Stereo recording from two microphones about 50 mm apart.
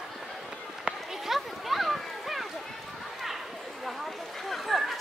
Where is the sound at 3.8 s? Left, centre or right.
Centre.